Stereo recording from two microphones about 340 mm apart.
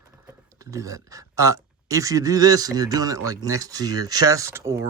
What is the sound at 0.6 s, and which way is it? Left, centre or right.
Speech, centre.